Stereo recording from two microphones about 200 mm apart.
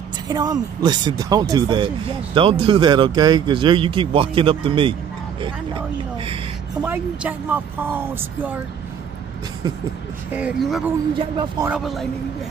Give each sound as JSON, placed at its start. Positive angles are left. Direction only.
{"t": 0.3, "sound": "speech", "side_deg": -20}
{"t": 6.8, "sound": "speech", "side_deg": -10}
{"t": 10.3, "sound": "speech", "side_deg": -5}
{"t": 11.1, "sound": "speech", "side_deg": -25}
{"t": 11.7, "sound": "speech", "side_deg": 0}